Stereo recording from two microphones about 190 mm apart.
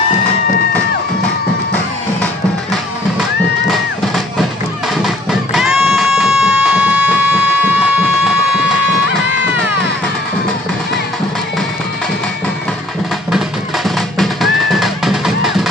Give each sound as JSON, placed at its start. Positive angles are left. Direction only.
{"t": 3.7, "sound": "music", "side_deg": 0}
{"t": 5.5, "sound": "music", "side_deg": -5}
{"t": 13.3, "sound": "music", "side_deg": 0}